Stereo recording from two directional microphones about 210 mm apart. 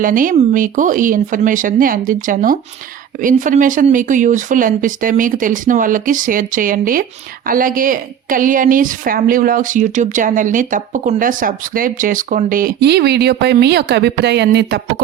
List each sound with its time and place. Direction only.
0.0 s a woman's voice: 40° right (ahead or behind)